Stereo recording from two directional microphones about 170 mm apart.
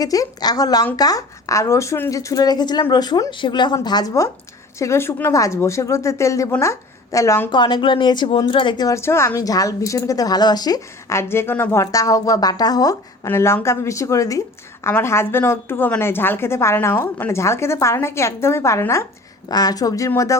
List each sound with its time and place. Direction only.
0.0 s a woman's voice: 20° left (ahead or behind)
7.5 s a woman's voice: 25° left (ahead or behind)